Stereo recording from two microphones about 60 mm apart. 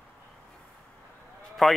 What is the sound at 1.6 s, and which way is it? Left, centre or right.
Speech, centre.